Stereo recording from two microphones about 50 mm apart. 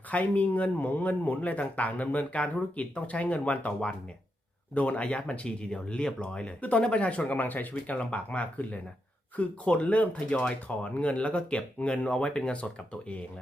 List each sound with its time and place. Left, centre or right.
0.1 s speech: left
7.3 s speech: left